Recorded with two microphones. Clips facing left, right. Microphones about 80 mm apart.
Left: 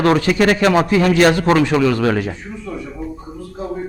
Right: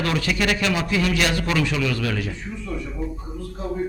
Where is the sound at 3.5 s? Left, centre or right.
Centre.